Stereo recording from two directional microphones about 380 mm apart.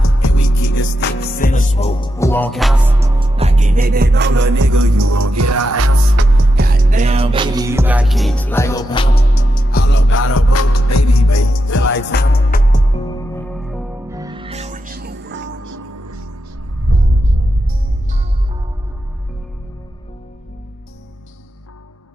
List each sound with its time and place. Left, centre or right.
0.0 s music: left
0.8 s music: left; by 3.1 s centre
3.2 s music: centre
4.6 s music: right
6.5 s music: right; by 11.9 s left
11.9 s music: left; by 15.5 s right
15.6 s music: right